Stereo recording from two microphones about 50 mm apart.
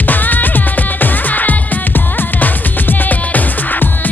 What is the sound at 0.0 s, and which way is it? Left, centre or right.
Music, left.